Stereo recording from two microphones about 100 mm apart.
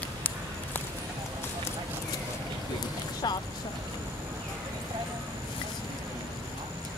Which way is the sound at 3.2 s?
45° left (ahead or behind).